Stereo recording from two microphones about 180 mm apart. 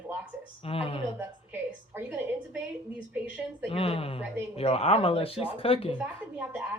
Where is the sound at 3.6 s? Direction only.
30° left (ahead or behind).